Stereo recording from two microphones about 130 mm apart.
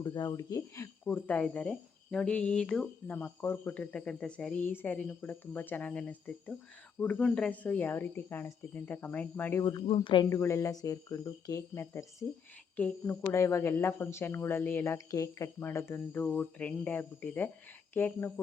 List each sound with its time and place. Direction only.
0.0 s speech: 30° left (ahead or behind)
1.0 s a woman's voice: 10° left (ahead or behind)
9.8 s speech: 40° left (ahead or behind)
10.2 s a woman's voice: 20° left (ahead or behind)